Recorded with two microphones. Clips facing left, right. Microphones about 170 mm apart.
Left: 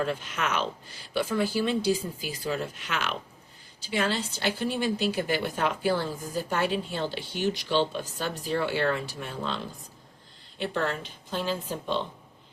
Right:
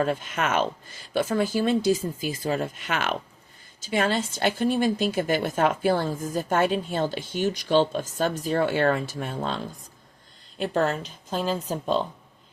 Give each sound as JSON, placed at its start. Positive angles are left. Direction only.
{"t": 0.0, "sound": "a woman's voice", "side_deg": -50}
{"t": 10.6, "sound": "speech", "side_deg": -40}